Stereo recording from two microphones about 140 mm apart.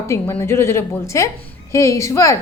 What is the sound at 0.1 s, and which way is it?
A woman's voice, 15° left (ahead or behind).